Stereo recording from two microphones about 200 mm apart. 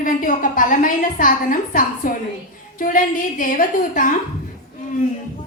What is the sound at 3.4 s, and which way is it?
Speech, 40° left (ahead or behind).